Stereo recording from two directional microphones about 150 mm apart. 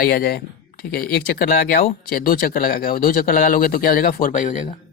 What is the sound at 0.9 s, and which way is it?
Speech, 70° left (ahead or behind).